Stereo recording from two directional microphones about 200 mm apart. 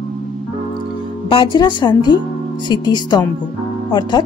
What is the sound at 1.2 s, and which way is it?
A woman's voice, 25° left (ahead or behind).